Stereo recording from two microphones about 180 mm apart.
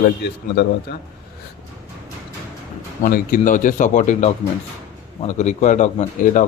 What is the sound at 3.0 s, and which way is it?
A man's voice, 50° left (ahead or behind).